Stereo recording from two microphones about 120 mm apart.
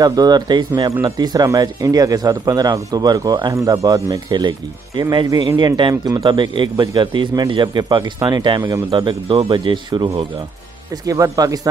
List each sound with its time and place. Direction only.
0.0 s speech: 35° right (ahead or behind)
11.1 s speech: 30° right (ahead or behind)